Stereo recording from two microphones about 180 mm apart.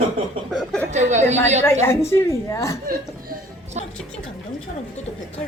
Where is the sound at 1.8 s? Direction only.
15° left (ahead or behind).